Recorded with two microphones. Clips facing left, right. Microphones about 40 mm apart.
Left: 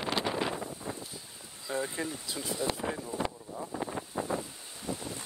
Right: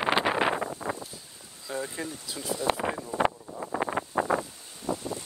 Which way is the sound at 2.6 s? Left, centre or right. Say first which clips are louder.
Right 6 dB; right.